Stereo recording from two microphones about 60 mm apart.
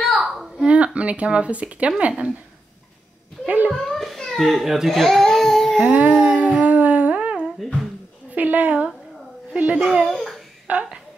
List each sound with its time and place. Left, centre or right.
0.1 s a sound: centre
0.7 s speech: right
3.4 s speech: right
3.7 s baby cry: centre
5.8 s humming: right
8.3 s a woman's voice: right
9.8 s a child's voice: centre
10.1 s babbling: centre
10.7 s speech: centre